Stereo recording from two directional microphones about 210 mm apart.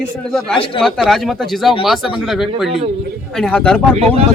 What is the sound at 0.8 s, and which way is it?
Speech, centre (ahead or behind).